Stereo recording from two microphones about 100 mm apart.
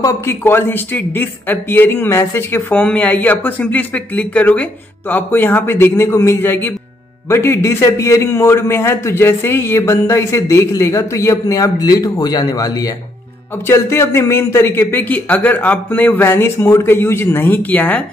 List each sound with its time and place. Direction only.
0.0 s a man's voice: 25° left (ahead or behind)
2.7 s a man's voice: 15° left (ahead or behind)